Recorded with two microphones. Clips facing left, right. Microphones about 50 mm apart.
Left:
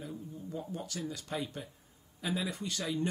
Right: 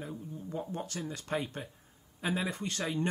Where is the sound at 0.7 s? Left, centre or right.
Right.